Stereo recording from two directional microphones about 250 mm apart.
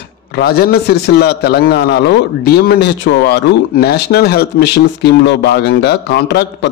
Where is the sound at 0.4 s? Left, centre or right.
Left.